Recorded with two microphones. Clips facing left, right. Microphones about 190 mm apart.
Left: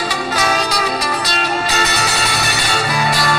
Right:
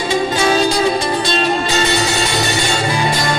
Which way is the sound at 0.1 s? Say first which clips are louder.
Right 8 dB; 25° right (ahead or behind).